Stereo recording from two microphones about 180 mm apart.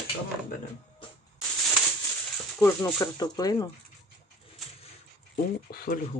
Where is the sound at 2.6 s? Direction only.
10° left (ahead or behind).